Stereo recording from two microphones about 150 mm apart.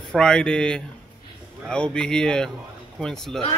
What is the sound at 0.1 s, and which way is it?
A man's voice, 5° left (ahead or behind).